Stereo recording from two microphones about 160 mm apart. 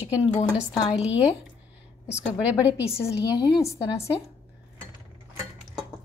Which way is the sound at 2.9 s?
15° left (ahead or behind).